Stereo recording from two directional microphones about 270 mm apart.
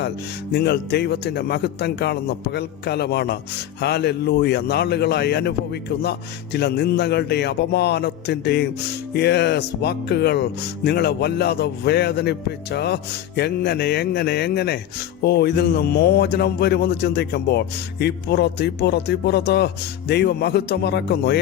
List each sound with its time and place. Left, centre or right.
0.5 s speech: left